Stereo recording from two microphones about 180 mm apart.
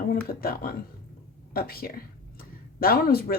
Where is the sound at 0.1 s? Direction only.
55° left (ahead or behind).